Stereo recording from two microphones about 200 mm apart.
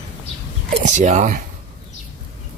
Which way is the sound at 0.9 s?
35° right (ahead or behind).